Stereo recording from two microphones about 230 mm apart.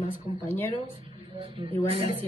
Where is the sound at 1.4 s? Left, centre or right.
Right.